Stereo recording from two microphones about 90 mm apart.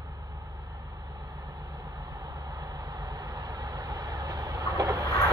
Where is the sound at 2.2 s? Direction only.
45° right (ahead or behind).